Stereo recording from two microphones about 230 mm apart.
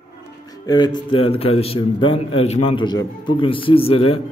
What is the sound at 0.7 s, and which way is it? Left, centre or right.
Speech, centre.